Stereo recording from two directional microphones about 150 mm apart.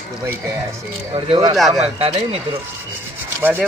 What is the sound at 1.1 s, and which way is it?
Speech, 35° right (ahead or behind).